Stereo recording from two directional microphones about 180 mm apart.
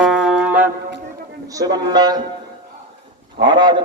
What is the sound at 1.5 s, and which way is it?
Speech, 20° right (ahead or behind).